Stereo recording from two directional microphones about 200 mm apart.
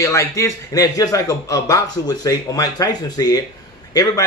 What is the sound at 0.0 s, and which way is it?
Speech, 15° left (ahead or behind).